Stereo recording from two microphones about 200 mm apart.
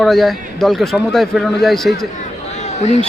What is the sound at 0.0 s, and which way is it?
A man's voice, centre (ahead or behind).